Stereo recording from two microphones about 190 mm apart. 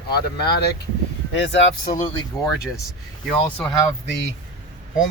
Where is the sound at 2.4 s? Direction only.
Centre (ahead or behind).